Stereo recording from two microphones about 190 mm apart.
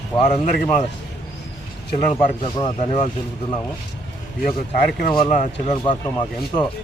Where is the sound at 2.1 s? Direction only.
25° left (ahead or behind).